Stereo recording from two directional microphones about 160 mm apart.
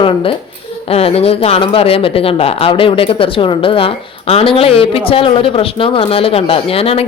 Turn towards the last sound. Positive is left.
turn(degrees=35)  # may be behind; listen again after turning